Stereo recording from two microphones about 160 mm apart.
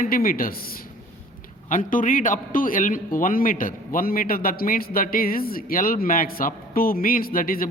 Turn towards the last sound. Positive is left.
turn(degrees=60)  # may be behind; listen again after turning